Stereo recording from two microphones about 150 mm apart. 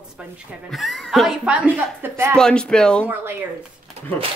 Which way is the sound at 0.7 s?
Centre (ahead or behind).